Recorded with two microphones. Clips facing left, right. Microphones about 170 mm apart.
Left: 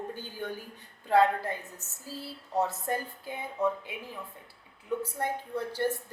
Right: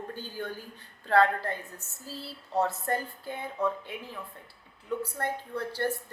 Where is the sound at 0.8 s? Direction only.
15° left (ahead or behind).